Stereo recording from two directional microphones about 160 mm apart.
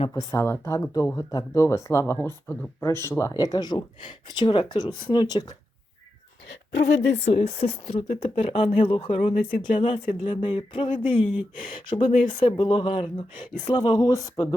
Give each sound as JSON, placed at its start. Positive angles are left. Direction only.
{"t": 0.1, "sound": "speech", "side_deg": 20}
{"t": 6.5, "sound": "speech", "side_deg": 90}
{"t": 7.3, "sound": "speech", "side_deg": 40}